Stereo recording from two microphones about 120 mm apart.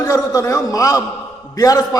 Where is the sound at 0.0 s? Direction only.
30° left (ahead or behind).